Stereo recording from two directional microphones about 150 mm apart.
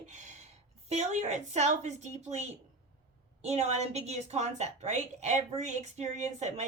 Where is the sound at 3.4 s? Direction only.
45° right (ahead or behind).